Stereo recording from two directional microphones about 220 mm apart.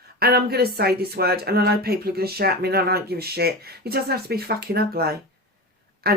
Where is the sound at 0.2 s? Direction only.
45° right (ahead or behind).